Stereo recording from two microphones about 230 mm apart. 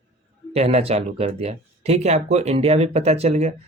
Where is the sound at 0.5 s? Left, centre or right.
Right.